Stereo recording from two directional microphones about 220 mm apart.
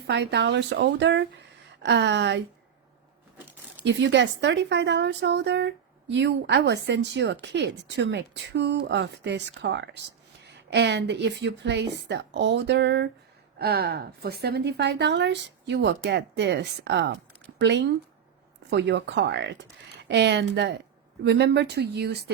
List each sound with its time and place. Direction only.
0.1 s a woman's voice: 50° right (ahead or behind)
3.8 s a woman's voice: 55° right (ahead or behind)